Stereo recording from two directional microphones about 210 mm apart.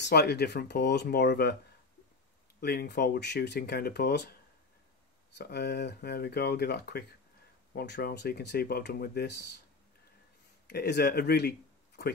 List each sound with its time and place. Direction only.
0.0 s speech: 50° left (ahead or behind)
2.6 s speech: 45° left (ahead or behind)
5.4 s speech: 50° left (ahead or behind)
10.7 s speech: 50° left (ahead or behind)